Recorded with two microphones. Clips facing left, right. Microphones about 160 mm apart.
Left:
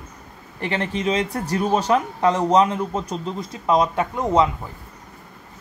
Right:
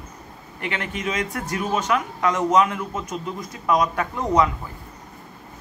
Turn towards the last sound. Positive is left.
turn(degrees=25)  # may be behind; listen again after turning